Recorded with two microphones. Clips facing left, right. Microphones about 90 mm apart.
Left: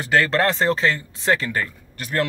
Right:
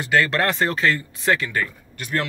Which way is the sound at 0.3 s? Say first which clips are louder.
Left 2 dB; 30° left (ahead or behind).